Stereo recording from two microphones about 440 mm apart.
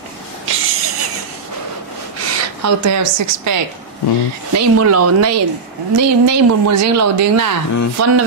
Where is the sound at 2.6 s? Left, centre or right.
Right.